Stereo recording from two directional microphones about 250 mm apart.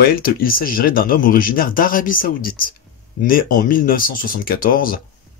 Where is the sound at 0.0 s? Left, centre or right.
Left.